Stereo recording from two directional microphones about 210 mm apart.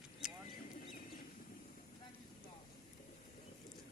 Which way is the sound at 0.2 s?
5° right (ahead or behind).